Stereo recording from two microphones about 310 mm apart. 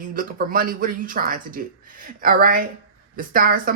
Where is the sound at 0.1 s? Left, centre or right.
Right.